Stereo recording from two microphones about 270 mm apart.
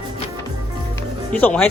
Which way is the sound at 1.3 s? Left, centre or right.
Centre.